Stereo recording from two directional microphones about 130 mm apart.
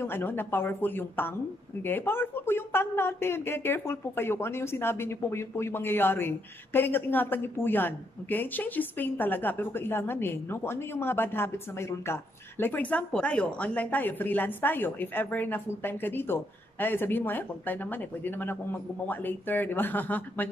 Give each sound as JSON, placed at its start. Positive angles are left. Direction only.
{"t": 0.0, "sound": "speech", "side_deg": 15}